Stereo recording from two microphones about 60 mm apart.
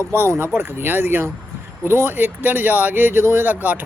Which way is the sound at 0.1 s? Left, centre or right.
Right.